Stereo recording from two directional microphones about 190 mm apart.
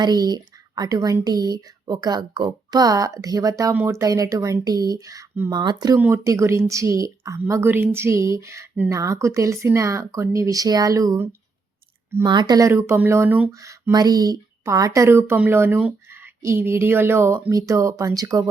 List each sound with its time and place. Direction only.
0.0 s speech: 20° right (ahead or behind)